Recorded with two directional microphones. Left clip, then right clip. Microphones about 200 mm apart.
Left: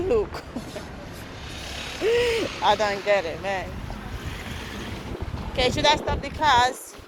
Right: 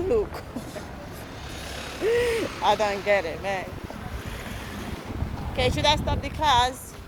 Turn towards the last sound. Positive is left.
turn(degrees=15)  # may be behind; listen again after turning